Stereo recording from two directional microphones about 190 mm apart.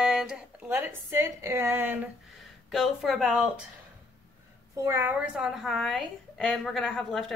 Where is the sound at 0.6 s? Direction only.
10° right (ahead or behind).